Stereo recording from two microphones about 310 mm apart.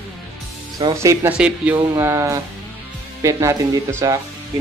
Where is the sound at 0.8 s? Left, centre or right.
Centre.